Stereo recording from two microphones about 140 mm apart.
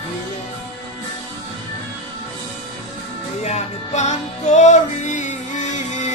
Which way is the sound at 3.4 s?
55° left (ahead or behind).